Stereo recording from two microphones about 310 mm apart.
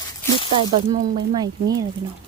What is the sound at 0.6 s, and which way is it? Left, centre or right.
Speech, centre.